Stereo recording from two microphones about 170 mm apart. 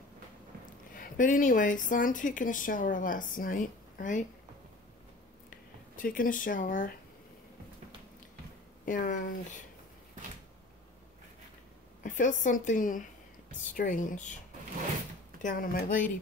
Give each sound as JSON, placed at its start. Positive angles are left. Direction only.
{"t": 0.9, "sound": "a woman's voice", "side_deg": 50}
{"t": 5.5, "sound": "speech", "side_deg": 55}
{"t": 8.8, "sound": "a woman's voice", "side_deg": 50}
{"t": 12.0, "sound": "a woman's voice", "side_deg": 50}
{"t": 15.4, "sound": "a woman's voice", "side_deg": 55}